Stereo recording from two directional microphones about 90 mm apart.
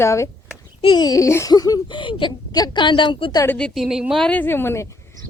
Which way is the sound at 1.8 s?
65° left (ahead or behind).